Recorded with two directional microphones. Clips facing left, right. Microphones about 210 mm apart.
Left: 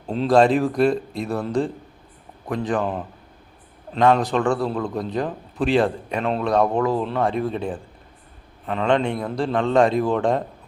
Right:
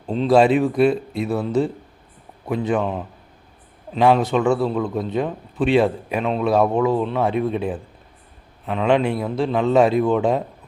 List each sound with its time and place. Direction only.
0.1 s a man's voice: centre (ahead or behind)